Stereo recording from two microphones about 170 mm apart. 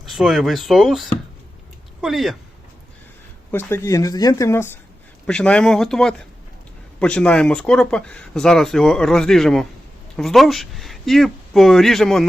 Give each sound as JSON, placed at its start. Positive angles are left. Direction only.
{"t": 0.0, "sound": "speech", "side_deg": 0}
{"t": 3.5, "sound": "speech", "side_deg": 15}